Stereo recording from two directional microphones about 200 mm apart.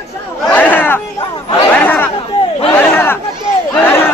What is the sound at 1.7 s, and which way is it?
Chatter, 10° left (ahead or behind).